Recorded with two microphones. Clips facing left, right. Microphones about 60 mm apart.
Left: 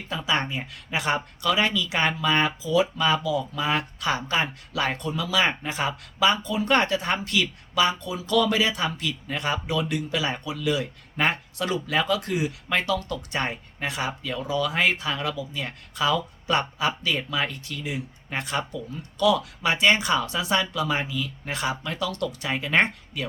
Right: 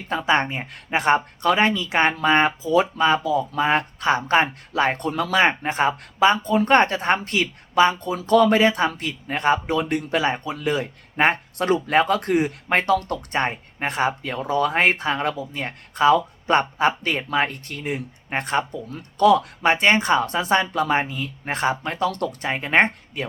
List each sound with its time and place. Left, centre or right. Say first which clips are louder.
0.1 s speech: right 6 dB; right
5.0 s speech: right 4 dB; right